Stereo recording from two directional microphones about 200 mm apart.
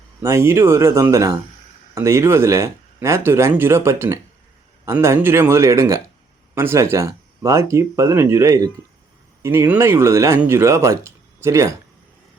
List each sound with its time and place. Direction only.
0.2 s speech: 15° right (ahead or behind)